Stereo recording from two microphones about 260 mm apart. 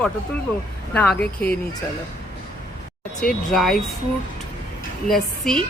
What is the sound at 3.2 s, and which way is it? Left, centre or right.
Speech, centre.